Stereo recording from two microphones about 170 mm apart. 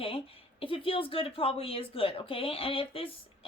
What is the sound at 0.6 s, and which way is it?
Speech, 30° left (ahead or behind).